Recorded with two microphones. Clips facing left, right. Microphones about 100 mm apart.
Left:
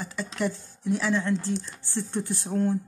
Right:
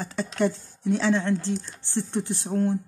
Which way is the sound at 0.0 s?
30° right (ahead or behind).